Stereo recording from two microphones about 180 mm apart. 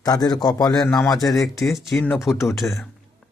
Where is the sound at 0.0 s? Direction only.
20° left (ahead or behind).